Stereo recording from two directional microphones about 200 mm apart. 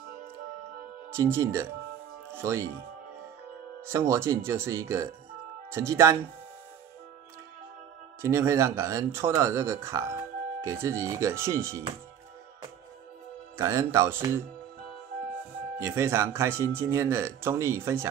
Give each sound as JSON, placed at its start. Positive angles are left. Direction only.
{"t": 1.1, "sound": "speech", "side_deg": -15}
{"t": 3.8, "sound": "speech", "side_deg": -10}
{"t": 8.2, "sound": "speech", "side_deg": -15}
{"t": 13.6, "sound": "speech", "side_deg": -15}
{"t": 15.8, "sound": "speech", "side_deg": -15}